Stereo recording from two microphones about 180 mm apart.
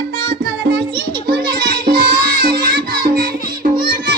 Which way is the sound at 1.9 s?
50° right (ahead or behind).